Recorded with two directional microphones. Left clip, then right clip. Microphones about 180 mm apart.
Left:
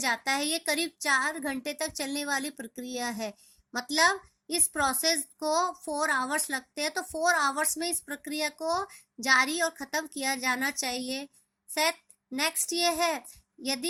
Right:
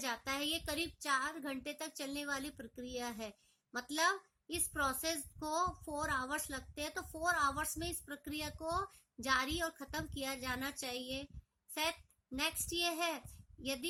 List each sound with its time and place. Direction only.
0.0 s a child's voice: 20° left (ahead or behind)